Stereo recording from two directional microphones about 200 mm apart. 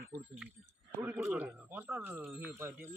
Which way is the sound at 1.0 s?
10° right (ahead or behind).